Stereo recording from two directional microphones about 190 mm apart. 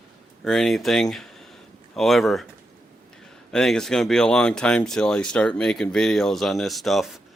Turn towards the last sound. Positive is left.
turn(degrees=0)  # may be behind; listen again after turning